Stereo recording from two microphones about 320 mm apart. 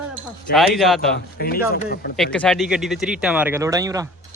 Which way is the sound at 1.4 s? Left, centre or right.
Left.